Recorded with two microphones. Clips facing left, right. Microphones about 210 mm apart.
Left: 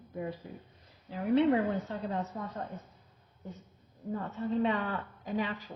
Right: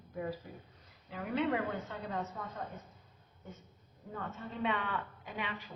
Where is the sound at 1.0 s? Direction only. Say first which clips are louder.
Left 8 dB; 35° left (ahead or behind).